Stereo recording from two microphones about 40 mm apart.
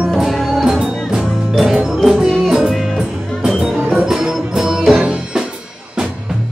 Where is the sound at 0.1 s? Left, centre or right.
Centre.